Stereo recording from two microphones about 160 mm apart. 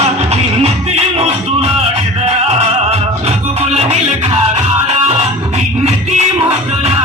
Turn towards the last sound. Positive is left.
turn(degrees=-40)  # may be behind; listen again after turning